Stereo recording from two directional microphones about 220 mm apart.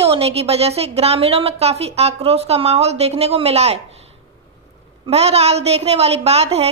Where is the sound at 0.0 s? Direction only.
25° right (ahead or behind).